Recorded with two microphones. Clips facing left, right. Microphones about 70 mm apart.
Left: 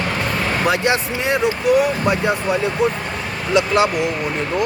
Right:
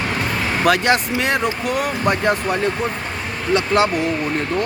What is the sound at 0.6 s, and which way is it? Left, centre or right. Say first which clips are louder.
Speech: right 3 dB; right.